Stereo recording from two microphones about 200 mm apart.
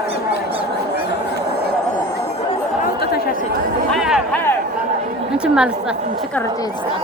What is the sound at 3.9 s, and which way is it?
Music, centre (ahead or behind).